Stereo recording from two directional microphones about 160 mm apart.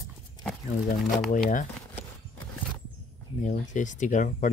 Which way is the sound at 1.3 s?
55° left (ahead or behind).